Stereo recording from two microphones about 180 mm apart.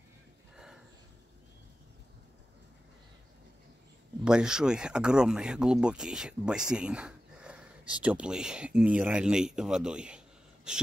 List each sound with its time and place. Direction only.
4.2 s speech: 5° right (ahead or behind)